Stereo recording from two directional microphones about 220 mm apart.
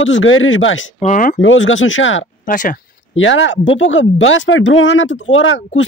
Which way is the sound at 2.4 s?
35° left (ahead or behind).